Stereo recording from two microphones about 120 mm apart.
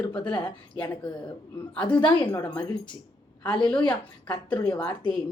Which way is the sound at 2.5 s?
10° left (ahead or behind).